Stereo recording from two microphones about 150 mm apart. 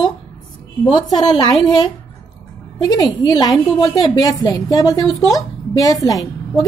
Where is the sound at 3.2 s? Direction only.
25° left (ahead or behind).